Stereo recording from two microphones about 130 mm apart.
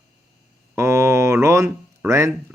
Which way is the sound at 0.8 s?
20° right (ahead or behind).